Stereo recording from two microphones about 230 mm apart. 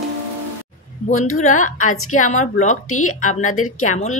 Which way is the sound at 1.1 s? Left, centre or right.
Left.